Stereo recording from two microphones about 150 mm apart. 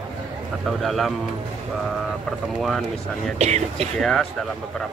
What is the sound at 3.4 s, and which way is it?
Speech, 45° right (ahead or behind).